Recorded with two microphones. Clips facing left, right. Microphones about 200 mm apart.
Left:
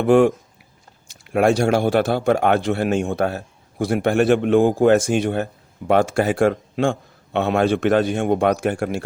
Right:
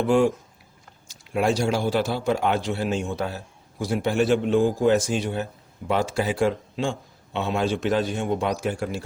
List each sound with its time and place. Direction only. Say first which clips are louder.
0.0 s a man's voice: left 5 dB; 60° left (ahead or behind)